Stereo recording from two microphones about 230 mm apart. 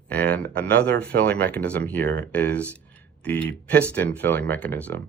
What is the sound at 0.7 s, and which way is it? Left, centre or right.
Speech, right.